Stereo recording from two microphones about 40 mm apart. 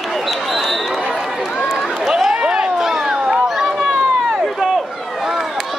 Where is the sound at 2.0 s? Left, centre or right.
Centre.